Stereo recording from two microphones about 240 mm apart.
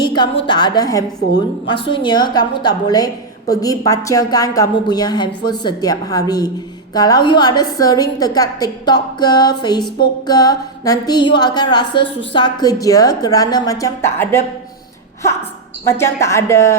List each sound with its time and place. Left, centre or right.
0.0 s a woman's voice: centre
15.9 s a woman's voice: centre